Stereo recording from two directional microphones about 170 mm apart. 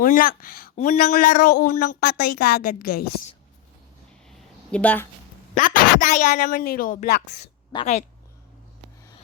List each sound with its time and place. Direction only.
0.0 s speech: 55° left (ahead or behind)
1.1 s speech: 50° left (ahead or behind)
2.0 s a woman's voice: 70° left (ahead or behind)
4.7 s a woman's voice: 10° left (ahead or behind)
5.5 s a woman's voice: 50° left (ahead or behind)